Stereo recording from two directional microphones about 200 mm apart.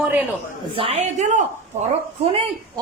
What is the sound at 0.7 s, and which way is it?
Speech, 30° right (ahead or behind).